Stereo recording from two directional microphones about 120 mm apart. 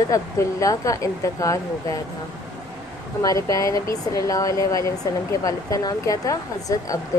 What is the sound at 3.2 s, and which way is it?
A woman's voice, 30° left (ahead or behind).